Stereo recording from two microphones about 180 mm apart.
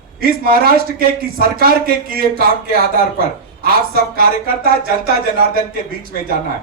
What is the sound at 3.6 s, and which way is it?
Speech, 55° right (ahead or behind).